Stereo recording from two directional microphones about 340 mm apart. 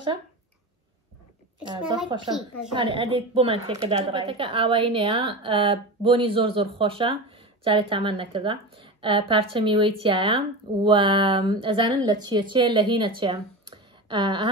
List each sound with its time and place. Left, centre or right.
1.6 s a woman's voice: centre
2.3 s a woman's voice: centre
2.7 s a woman's voice: centre